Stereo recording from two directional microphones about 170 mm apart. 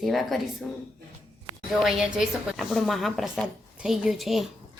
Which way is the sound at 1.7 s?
Centre (ahead or behind).